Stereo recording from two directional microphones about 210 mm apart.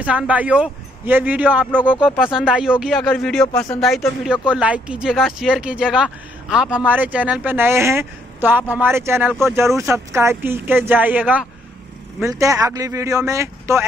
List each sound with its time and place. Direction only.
0.0 s speech: 5° right (ahead or behind)